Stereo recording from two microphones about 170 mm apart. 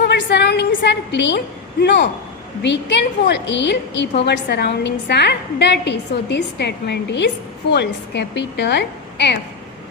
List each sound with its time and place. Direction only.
0.0 s a woman's voice: 85° left